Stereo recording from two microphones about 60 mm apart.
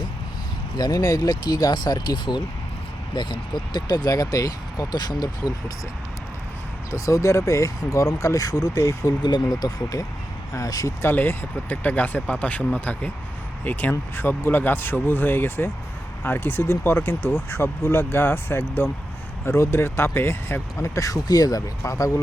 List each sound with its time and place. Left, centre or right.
0.9 s speech: left
4.0 s speech: left
6.9 s speech: left
11.0 s speech: left
14.2 s speech: left
20.7 s speech: left